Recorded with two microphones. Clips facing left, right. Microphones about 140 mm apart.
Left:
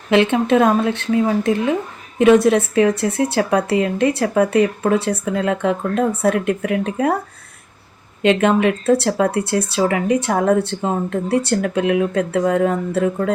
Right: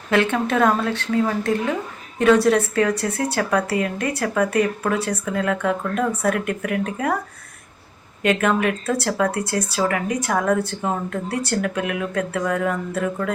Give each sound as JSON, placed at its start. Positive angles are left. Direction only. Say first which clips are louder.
{"t": 0.1, "sound": "speech", "louder": "left 5 dB", "side_deg": 20}
{"t": 8.2, "sound": "speech", "louder": "left 5 dB", "side_deg": 25}